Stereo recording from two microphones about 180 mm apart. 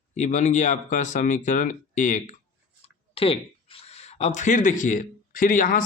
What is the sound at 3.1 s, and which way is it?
A man's voice, 30° left (ahead or behind).